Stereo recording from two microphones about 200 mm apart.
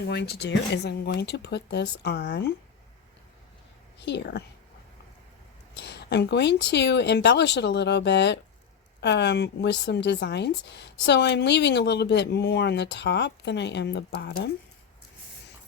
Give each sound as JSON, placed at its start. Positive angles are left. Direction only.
{"t": 0.1, "sound": "speech", "side_deg": 55}
{"t": 4.0, "sound": "speech", "side_deg": 60}
{"t": 5.7, "sound": "speech", "side_deg": 60}